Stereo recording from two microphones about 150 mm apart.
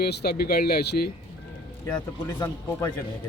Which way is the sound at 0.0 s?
90° left.